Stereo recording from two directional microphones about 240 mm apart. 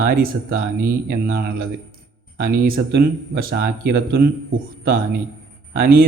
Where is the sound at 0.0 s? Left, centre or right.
Right.